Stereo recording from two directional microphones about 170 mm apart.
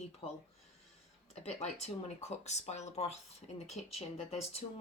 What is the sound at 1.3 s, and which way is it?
Speech, 40° left (ahead or behind).